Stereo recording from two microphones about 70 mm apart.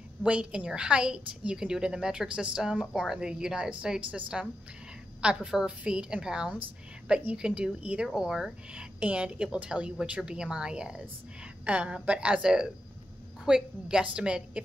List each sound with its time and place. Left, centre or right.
0.2 s a woman's voice: centre